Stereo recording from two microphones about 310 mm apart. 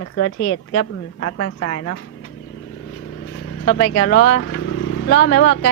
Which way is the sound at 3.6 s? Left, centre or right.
Left.